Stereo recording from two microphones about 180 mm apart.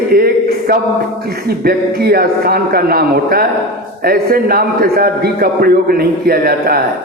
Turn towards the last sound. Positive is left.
turn(degrees=-55)  # may be behind; listen again after turning